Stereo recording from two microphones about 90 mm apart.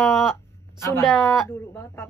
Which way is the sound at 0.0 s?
5° right (ahead or behind).